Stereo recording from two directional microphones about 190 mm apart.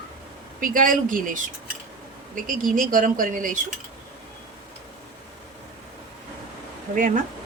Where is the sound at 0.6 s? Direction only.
45° right (ahead or behind).